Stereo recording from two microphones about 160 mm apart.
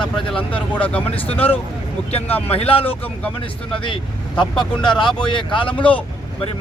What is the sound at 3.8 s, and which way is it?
Speech, 30° left (ahead or behind).